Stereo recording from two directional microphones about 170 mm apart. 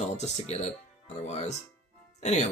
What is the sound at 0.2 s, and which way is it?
Speech, 40° left (ahead or behind).